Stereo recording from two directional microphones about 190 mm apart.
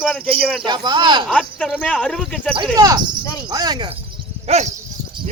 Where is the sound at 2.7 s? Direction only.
20° right (ahead or behind).